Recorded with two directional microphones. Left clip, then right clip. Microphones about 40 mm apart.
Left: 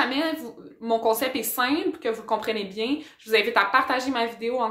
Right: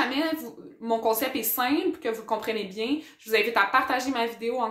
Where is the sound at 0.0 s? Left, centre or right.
Left.